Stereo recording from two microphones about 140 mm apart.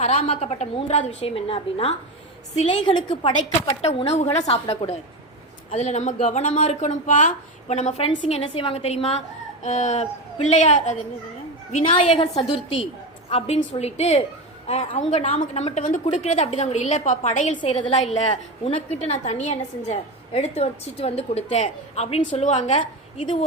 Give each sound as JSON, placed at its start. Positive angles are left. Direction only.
{"t": 0.0, "sound": "a woman's voice", "side_deg": 50}
{"t": 3.8, "sound": "a woman's voice", "side_deg": 45}
{"t": 9.6, "sound": "speech", "side_deg": 55}
{"t": 11.9, "sound": "a woman's voice", "side_deg": 40}
{"t": 13.6, "sound": "a woman's voice", "side_deg": 50}
{"t": 17.6, "sound": "a woman's voice", "side_deg": 40}